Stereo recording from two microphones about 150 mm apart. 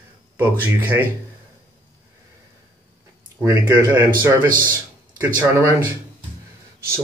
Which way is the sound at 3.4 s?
20° right (ahead or behind).